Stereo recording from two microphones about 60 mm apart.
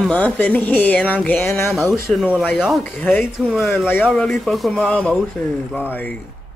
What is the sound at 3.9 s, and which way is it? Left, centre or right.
Speech, left.